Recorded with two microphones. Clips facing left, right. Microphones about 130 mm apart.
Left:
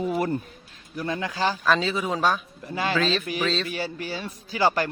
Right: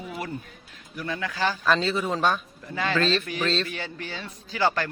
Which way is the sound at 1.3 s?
15° left (ahead or behind).